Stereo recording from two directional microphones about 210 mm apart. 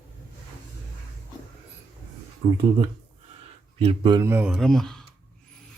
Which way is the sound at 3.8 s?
25° right (ahead or behind).